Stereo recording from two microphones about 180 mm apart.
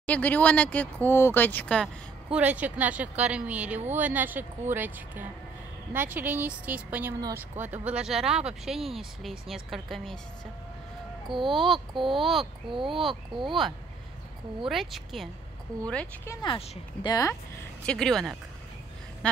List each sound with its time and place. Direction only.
0.0 s speech: 10° left (ahead or behind)
2.3 s speech: 10° right (ahead or behind)
11.3 s speech: centre (ahead or behind)
12.6 s speech: 30° right (ahead or behind)
14.7 s speech: centre (ahead or behind)
16.3 s speech: 25° left (ahead or behind)
17.8 s speech: 5° left (ahead or behind)